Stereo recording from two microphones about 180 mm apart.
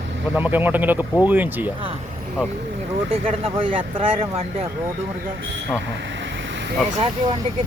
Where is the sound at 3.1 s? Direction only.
30° right (ahead or behind).